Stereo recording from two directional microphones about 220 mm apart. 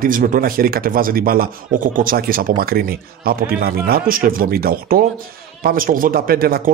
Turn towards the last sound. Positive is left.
turn(degrees=-40)  # may be behind; listen again after turning